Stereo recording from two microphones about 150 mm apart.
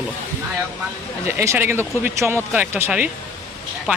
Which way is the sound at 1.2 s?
20° right (ahead or behind).